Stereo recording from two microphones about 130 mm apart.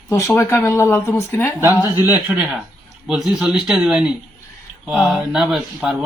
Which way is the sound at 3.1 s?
5° right (ahead or behind).